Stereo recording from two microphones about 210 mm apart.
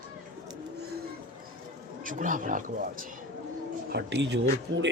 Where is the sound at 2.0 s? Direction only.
40° right (ahead or behind).